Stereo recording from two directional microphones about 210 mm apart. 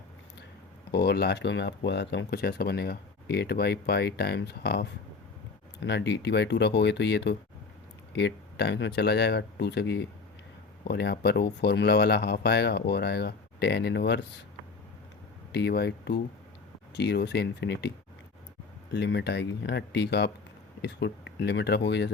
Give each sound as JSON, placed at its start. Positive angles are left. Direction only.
{"t": 0.9, "sound": "speech", "side_deg": 50}
{"t": 15.5, "sound": "speech", "side_deg": 50}
{"t": 18.9, "sound": "speech", "side_deg": 55}